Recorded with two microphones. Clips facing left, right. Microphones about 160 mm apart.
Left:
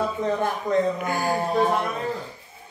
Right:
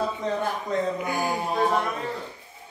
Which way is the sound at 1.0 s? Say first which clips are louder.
Left 2 dB; 15° right (ahead or behind).